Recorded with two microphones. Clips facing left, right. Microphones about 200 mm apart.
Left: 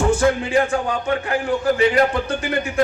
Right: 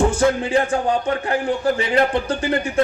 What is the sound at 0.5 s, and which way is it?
A man's voice, 35° right (ahead or behind).